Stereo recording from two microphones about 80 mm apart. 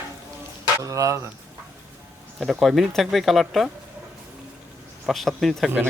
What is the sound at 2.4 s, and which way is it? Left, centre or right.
Speech, centre.